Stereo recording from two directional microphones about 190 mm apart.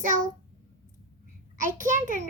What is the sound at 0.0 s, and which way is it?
Speech, 45° right (ahead or behind).